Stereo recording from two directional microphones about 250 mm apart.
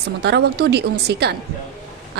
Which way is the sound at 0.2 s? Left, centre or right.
Right.